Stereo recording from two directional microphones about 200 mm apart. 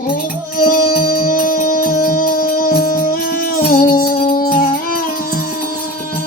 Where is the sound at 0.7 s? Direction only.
45° left (ahead or behind).